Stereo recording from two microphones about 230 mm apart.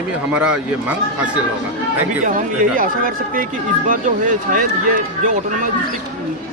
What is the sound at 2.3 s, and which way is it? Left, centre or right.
Speech, right.